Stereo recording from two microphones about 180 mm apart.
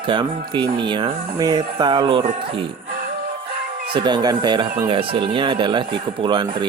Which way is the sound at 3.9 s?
25° right (ahead or behind).